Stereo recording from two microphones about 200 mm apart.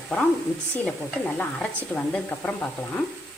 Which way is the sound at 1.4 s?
5° left (ahead or behind).